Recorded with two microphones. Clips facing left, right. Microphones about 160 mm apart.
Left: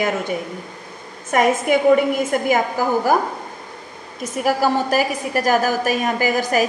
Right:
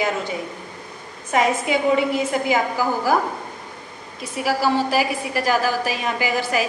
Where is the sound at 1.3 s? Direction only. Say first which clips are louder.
Left 3 dB; 50° left (ahead or behind).